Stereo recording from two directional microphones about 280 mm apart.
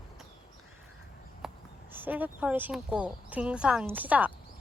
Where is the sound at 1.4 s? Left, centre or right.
Centre.